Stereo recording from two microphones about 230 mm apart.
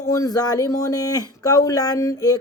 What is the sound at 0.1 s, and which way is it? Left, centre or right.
Speech, centre.